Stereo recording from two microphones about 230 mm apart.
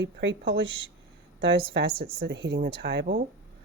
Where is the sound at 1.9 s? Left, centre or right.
Right.